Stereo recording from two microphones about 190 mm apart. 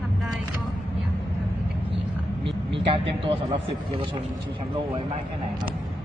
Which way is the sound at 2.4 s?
25° right (ahead or behind).